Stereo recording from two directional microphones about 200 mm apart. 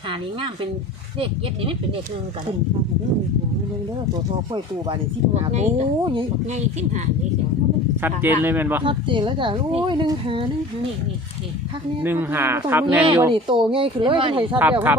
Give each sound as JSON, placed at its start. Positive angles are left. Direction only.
{"t": 0.1, "sound": "speech", "side_deg": -25}
{"t": 4.5, "sound": "speech", "side_deg": -30}
{"t": 8.0, "sound": "speech", "side_deg": -10}
{"t": 8.8, "sound": "speech", "side_deg": -25}
{"t": 12.0, "sound": "speech", "side_deg": -10}
{"t": 13.1, "sound": "speech", "side_deg": -25}
{"t": 14.5, "sound": "speech", "side_deg": -10}